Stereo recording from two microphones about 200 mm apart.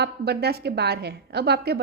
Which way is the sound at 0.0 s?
55° right (ahead or behind).